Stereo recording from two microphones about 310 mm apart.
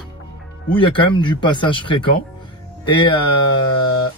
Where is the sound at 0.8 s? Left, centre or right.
Centre.